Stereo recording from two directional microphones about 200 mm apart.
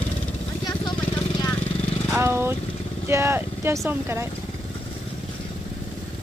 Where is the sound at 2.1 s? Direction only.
10° right (ahead or behind).